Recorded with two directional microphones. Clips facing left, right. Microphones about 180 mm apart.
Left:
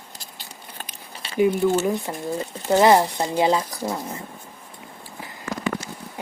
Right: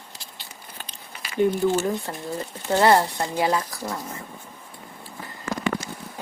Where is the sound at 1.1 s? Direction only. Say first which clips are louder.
Left 2 dB; 35° left (ahead or behind).